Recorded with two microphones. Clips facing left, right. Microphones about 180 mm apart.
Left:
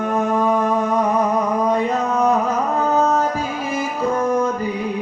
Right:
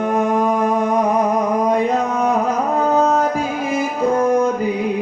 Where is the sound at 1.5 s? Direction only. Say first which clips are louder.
Right 2 dB; 10° right (ahead or behind).